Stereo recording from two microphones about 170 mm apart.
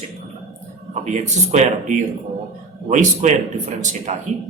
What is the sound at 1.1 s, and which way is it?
Speech, 40° right (ahead or behind).